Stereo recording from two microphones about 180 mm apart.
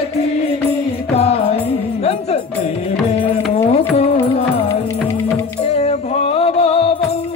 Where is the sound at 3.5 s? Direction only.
35° left (ahead or behind).